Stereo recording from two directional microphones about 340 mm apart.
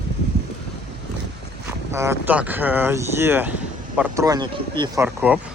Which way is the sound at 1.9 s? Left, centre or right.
Centre.